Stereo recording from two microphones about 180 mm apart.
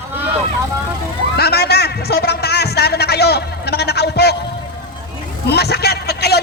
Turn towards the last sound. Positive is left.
turn(degrees=65)  # may be behind; listen again after turning